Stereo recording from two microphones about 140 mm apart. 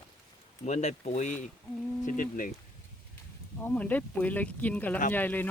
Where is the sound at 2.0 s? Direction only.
75° left (ahead or behind).